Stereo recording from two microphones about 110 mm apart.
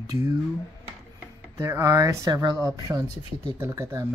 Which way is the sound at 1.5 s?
30° right (ahead or behind).